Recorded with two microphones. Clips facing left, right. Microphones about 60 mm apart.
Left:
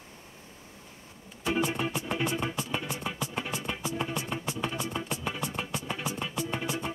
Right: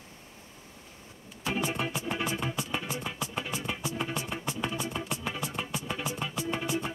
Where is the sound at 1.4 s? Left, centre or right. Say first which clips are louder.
Left 2 dB; centre.